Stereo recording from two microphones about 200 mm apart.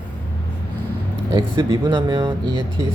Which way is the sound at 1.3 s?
20° right (ahead or behind).